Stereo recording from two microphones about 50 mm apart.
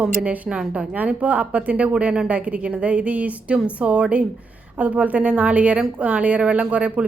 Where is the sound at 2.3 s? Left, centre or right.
Right.